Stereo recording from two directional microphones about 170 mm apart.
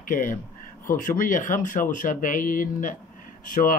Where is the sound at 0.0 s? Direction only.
50° left (ahead or behind).